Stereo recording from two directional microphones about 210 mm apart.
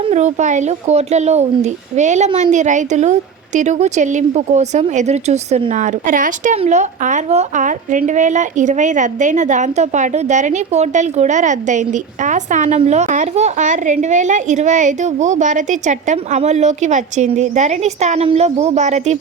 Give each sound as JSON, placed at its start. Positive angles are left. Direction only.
{"t": 0.0, "sound": "speech", "side_deg": -35}